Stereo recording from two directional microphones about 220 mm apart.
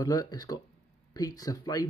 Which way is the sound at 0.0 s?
15° left (ahead or behind).